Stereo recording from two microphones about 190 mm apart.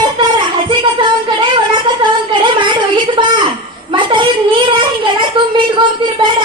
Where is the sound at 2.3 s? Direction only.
25° right (ahead or behind).